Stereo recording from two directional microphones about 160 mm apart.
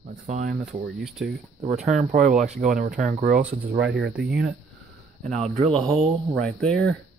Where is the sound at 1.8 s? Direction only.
50° right (ahead or behind).